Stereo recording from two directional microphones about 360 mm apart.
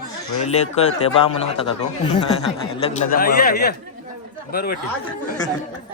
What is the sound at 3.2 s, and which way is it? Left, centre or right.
Speech, left.